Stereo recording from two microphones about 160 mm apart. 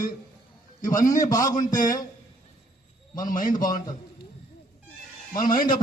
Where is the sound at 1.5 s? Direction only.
55° left (ahead or behind).